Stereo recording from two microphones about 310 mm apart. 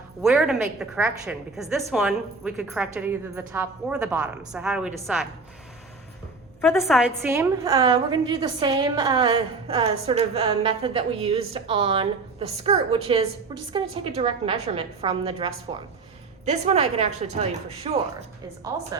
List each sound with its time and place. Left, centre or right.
0.2 s a woman's voice: centre
6.6 s a woman's voice: centre; by 17.9 s right